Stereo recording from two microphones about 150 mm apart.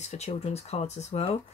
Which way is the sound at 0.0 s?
45° left (ahead or behind).